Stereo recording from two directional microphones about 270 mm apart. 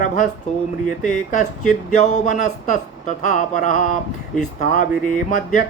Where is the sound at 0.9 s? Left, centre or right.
Left.